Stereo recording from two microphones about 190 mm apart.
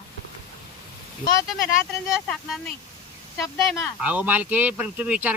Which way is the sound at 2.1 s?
Centre (ahead or behind).